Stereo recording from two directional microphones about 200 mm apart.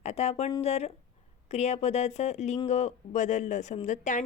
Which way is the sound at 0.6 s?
30° left (ahead or behind).